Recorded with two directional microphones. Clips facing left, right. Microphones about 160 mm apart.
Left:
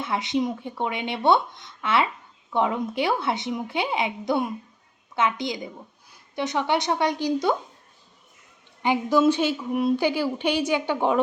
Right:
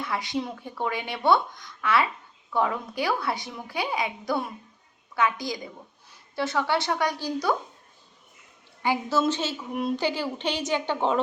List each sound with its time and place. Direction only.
0.0 s speech: 20° left (ahead or behind)
8.8 s a woman's voice: 20° left (ahead or behind)